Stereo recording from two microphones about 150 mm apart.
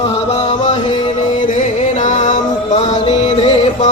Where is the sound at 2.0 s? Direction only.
55° left (ahead or behind).